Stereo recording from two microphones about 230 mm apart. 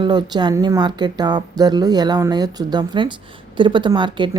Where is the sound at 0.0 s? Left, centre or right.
Centre.